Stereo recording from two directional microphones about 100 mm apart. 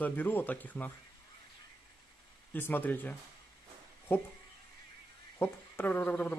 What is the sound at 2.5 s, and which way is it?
Speech, 20° left (ahead or behind).